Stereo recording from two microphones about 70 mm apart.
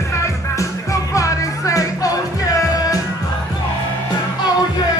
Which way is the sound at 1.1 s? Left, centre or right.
Left.